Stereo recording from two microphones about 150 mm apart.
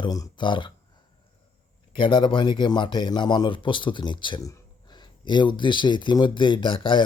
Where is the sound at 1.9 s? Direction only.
30° left (ahead or behind).